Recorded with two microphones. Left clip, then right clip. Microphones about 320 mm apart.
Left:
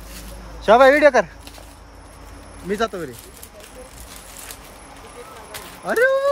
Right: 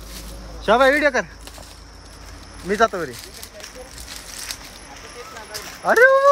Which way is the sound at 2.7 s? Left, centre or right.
Centre.